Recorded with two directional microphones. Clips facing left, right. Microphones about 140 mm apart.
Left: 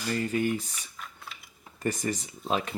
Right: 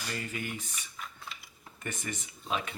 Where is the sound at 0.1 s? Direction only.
35° left (ahead or behind).